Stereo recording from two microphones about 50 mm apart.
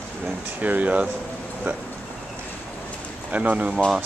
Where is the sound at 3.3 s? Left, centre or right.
Right.